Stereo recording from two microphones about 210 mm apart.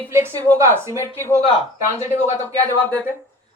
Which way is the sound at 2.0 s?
35° left (ahead or behind).